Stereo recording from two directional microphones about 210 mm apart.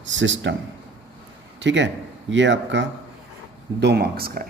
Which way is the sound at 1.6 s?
60° right (ahead or behind).